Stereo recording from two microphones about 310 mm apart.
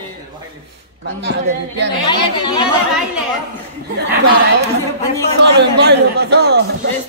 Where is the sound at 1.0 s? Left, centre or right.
Right.